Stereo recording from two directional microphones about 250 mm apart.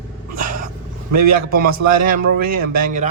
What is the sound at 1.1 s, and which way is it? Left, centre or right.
Speech, right.